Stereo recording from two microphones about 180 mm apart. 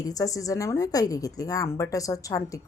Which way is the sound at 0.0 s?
20° left (ahead or behind).